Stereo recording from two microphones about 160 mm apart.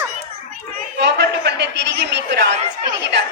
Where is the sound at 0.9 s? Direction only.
90° right.